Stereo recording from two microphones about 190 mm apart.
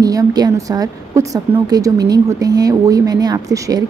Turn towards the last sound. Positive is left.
turn(degrees=-20)  # may be behind; listen again after turning